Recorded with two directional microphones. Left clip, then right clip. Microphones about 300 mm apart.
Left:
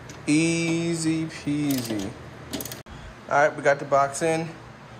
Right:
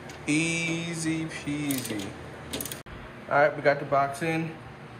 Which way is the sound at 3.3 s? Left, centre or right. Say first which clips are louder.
Left 2 dB; centre.